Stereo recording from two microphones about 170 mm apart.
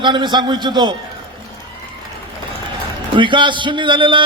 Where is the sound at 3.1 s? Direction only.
30° right (ahead or behind).